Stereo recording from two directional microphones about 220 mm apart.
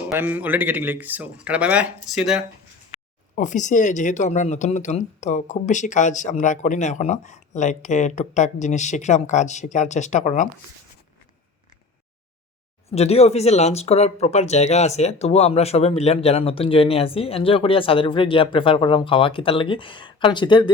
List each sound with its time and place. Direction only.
0.1 s speech: 10° right (ahead or behind)
3.3 s speech: 35° left (ahead or behind)
12.9 s speech: 30° left (ahead or behind)